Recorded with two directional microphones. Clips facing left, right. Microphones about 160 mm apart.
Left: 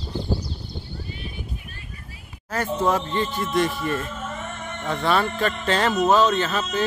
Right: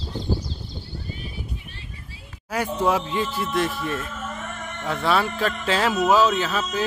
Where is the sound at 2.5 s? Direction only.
10° right (ahead or behind).